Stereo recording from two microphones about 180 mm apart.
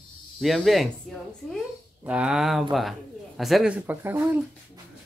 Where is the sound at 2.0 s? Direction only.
5° right (ahead or behind).